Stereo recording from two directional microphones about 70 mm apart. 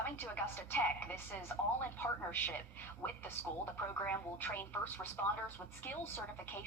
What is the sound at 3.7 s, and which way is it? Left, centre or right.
Speech, left.